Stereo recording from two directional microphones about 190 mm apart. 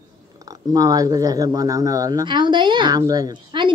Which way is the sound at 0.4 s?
20° right (ahead or behind).